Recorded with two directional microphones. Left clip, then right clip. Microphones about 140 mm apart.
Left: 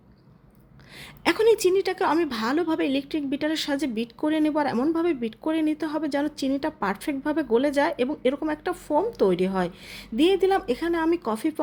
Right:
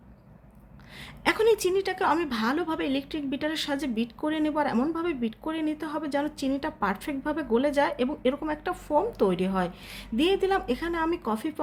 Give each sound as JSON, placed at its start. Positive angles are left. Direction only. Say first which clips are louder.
{"t": 0.9, "sound": "a woman's voice", "louder": "left 2 dB", "side_deg": 30}